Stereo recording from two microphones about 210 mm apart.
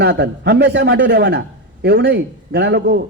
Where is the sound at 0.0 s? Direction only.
55° right (ahead or behind).